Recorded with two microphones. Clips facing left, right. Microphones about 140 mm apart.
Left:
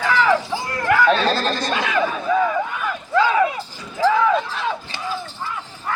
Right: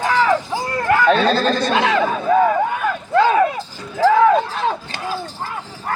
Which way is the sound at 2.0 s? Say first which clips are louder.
Right 4 dB; 50° right (ahead or behind).